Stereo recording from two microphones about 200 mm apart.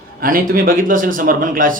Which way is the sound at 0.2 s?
45° right (ahead or behind).